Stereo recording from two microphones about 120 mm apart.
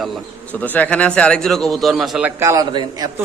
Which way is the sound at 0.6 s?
15° left (ahead or behind).